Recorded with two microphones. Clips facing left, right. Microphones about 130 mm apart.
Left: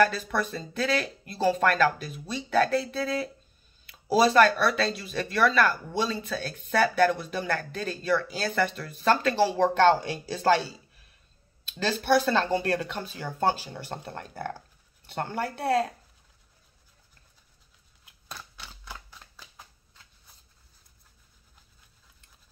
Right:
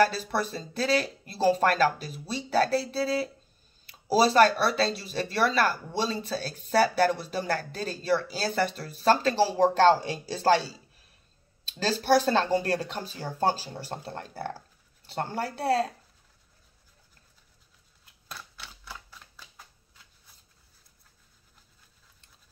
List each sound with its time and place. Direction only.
0.0 s speech: 35° right (ahead or behind)
11.8 s speech: 35° right (ahead or behind)
18.3 s typewriter: centre (ahead or behind)